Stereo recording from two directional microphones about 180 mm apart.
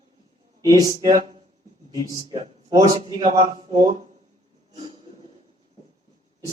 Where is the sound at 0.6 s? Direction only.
20° right (ahead or behind).